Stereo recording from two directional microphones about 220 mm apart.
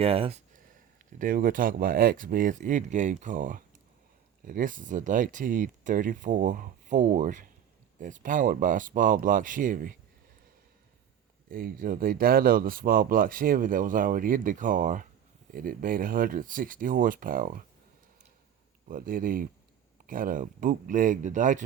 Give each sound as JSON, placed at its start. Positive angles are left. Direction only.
{"t": 0.0, "sound": "speech", "side_deg": -25}
{"t": 1.2, "sound": "speech", "side_deg": -40}
{"t": 11.5, "sound": "speech", "side_deg": -40}
{"t": 18.9, "sound": "speech", "side_deg": -40}